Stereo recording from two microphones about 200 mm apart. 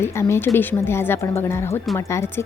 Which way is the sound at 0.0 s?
15° left (ahead or behind).